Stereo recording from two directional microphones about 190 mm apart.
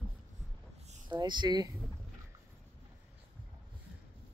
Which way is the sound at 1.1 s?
25° right (ahead or behind).